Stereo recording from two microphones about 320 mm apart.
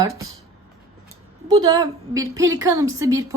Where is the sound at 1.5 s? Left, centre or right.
Centre.